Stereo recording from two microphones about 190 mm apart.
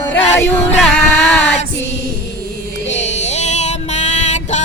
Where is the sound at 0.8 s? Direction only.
Centre (ahead or behind).